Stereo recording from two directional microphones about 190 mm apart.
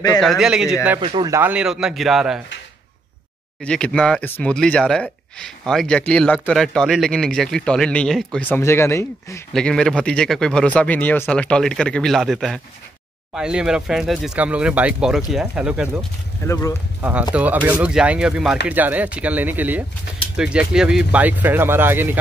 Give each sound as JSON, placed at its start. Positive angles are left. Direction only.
{"t": 0.2, "sound": "speech", "side_deg": 0}
{"t": 1.0, "sound": "speech", "side_deg": -25}
{"t": 1.3, "sound": "speech", "side_deg": -10}
{"t": 3.6, "sound": "speech", "side_deg": 5}
{"t": 16.4, "sound": "speech", "side_deg": 15}
{"t": 17.0, "sound": "speech", "side_deg": -5}